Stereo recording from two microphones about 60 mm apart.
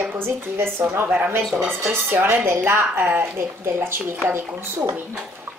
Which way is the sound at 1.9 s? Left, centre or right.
Right.